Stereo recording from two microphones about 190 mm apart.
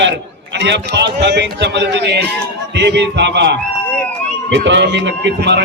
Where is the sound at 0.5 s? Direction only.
65° right (ahead or behind).